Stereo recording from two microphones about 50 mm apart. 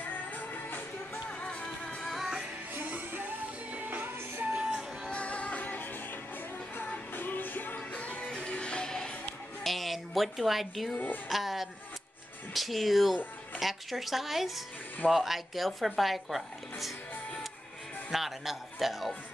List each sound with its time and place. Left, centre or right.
0.0 s music: left
1.4 s music: left
2.0 s music: centre
2.7 s music: right
5.1 s music: left
8.3 s music: centre
9.6 s music: centre
11.2 s speech: centre
18.1 s speech: centre